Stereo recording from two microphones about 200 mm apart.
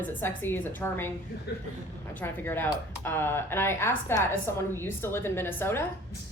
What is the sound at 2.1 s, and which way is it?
A woman's voice, 10° left (ahead or behind).